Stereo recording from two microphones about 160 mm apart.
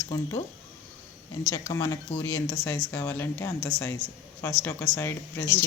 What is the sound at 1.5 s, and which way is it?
Speech, 15° left (ahead or behind).